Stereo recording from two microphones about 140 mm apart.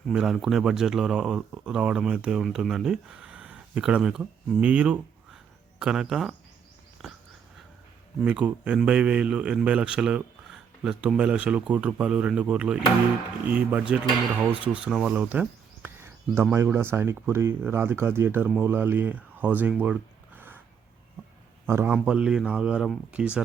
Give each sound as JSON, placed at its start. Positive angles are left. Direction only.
{"t": 0.1, "sound": "speech", "side_deg": -5}
{"t": 7.0, "sound": "a sound", "side_deg": 0}
{"t": 8.2, "sound": "speech", "side_deg": -10}
{"t": 21.7, "sound": "speech", "side_deg": -15}